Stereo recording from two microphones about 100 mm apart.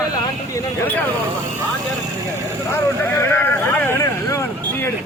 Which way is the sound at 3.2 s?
25° left (ahead or behind).